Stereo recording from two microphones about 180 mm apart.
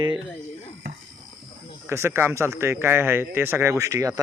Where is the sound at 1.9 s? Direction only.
15° right (ahead or behind).